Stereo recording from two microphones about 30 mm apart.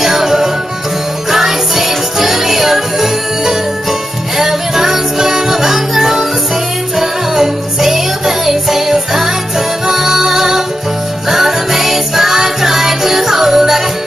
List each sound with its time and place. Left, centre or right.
0.0 s music: centre